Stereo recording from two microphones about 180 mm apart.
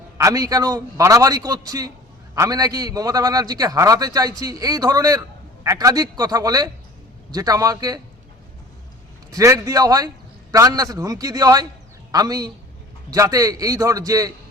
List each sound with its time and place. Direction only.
0.2 s a man's voice: 20° right (ahead or behind)
9.3 s a man's voice: 15° right (ahead or behind)